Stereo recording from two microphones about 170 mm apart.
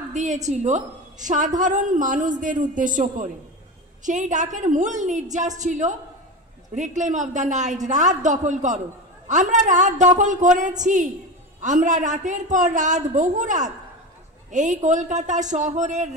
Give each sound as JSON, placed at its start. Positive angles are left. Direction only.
{"t": 0.1, "sound": "a woman's voice", "side_deg": -45}